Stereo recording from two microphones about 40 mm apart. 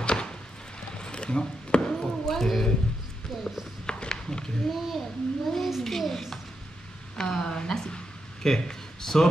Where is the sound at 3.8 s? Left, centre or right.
Left.